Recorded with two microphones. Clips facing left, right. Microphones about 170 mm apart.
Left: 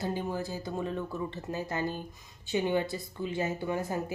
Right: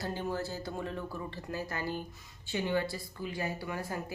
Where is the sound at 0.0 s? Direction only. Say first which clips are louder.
Left 2 dB; 15° left (ahead or behind).